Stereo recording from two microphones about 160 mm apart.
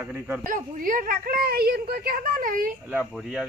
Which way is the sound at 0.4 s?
55° right (ahead or behind).